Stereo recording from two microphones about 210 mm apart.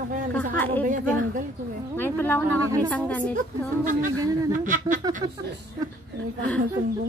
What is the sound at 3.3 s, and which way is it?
A woman's voice, 40° right (ahead or behind).